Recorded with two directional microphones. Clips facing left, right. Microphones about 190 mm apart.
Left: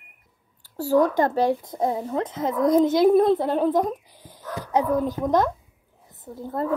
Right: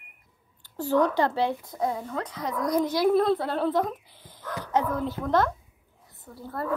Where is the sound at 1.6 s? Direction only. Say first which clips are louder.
Left 4 dB; 25° left (ahead or behind).